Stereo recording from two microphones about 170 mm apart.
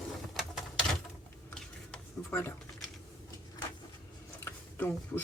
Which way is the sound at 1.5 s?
10° left (ahead or behind).